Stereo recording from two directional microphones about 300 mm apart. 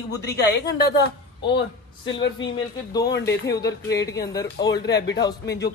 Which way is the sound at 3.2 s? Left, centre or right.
Centre.